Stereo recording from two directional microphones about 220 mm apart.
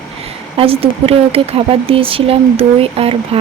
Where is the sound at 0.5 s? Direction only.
25° right (ahead or behind).